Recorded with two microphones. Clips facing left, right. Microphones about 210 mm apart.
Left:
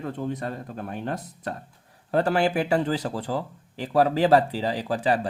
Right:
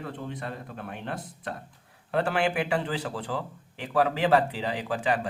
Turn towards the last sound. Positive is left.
turn(degrees=35)  # may be behind; listen again after turning